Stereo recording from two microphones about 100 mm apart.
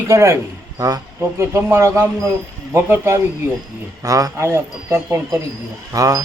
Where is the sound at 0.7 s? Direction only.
40° right (ahead or behind).